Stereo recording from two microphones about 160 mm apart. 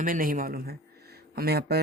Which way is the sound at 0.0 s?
60° right (ahead or behind).